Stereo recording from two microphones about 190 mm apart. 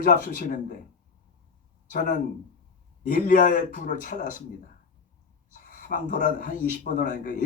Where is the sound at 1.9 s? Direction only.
45° left (ahead or behind).